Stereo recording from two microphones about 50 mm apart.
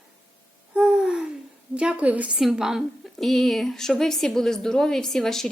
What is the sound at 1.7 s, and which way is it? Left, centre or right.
Speech, right.